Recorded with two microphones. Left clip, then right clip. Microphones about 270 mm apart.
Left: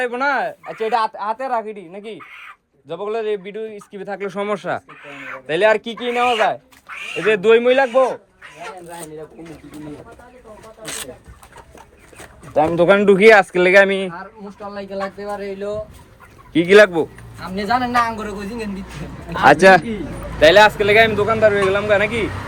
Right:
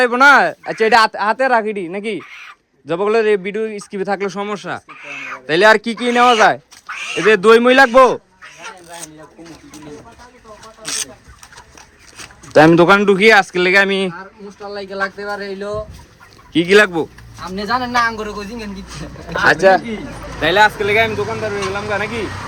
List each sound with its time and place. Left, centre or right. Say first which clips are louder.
0.0 s speech: right 10 dB; centre
2.3 s speech: right 2 dB; centre
2.8 s speech: right 8 dB; right; by 4.8 s centre
4.9 s a man's voice: right 4 dB; centre
7.9 s a man's voice: right 6 dB; right
12.7 s speech: right 3 dB; centre
13.0 s speech: even; centre
14.7 s speech: right 4 dB; right
16.5 s a man's voice: left 1 dB; centre
20.4 s speech: left 3 dB; centre